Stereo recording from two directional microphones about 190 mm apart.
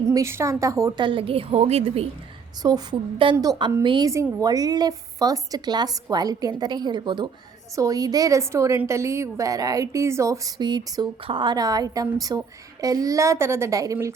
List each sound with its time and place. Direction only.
0.1 s a woman's voice: 15° right (ahead or behind); by 2.0 s 35° right (ahead or behind)
2.6 s a woman's voice: 20° right (ahead or behind)